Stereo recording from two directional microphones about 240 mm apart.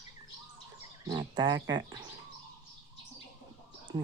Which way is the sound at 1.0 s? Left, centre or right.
Centre.